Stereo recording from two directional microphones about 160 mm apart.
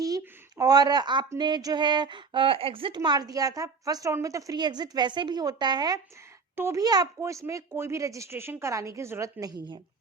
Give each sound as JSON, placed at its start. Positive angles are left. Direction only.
{"t": 0.0, "sound": "speech", "side_deg": -20}